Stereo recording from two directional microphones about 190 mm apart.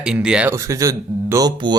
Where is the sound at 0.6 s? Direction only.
15° right (ahead or behind).